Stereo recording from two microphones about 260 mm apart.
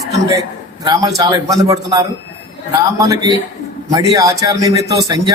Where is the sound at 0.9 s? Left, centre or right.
Centre.